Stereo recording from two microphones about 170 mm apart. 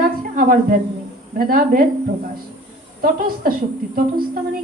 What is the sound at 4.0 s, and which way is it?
Speech, 60° right (ahead or behind).